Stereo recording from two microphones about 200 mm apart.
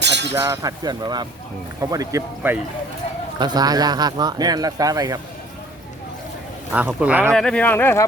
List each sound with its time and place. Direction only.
0.0 s chink: 60° right (ahead or behind)
0.3 s speech: 15° right (ahead or behind)
6.7 s speech: 10° right (ahead or behind)
7.3 s speech: 5° left (ahead or behind)